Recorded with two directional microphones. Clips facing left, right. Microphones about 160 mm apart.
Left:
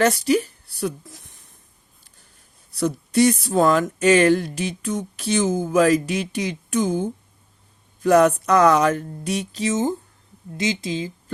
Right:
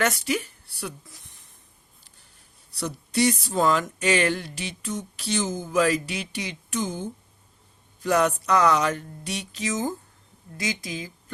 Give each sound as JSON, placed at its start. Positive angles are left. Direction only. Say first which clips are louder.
{"t": 0.0, "sound": "speech", "louder": "left 7 dB", "side_deg": 35}
{"t": 2.7, "sound": "speech", "louder": "left 7 dB", "side_deg": 50}